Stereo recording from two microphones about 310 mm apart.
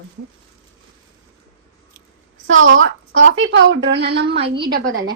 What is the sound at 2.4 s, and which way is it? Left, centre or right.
A woman's voice, right.